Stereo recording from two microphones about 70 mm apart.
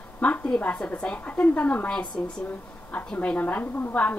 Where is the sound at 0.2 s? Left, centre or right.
Centre.